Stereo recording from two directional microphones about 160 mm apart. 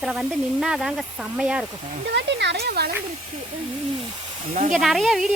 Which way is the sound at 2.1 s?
90° right.